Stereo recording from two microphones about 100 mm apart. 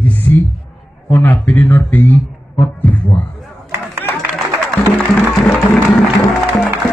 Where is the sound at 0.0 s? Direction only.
20° left (ahead or behind).